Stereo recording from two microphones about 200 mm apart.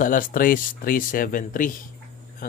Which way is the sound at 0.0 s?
45° left (ahead or behind).